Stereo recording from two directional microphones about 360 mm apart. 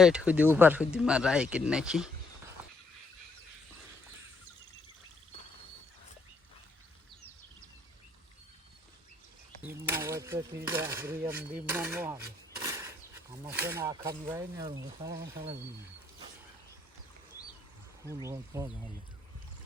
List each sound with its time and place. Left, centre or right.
0.0 s speech: centre
9.6 s cutlery: centre
15.2 s speech: right
18.3 s cutlery: centre